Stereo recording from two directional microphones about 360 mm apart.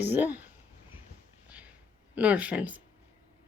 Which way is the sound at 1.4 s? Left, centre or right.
Centre.